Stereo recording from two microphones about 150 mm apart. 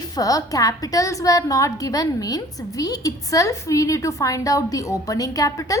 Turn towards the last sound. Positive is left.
turn(degrees=20)  # may be behind; listen again after turning